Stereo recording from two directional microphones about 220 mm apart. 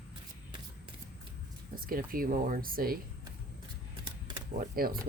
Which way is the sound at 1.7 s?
40° right (ahead or behind).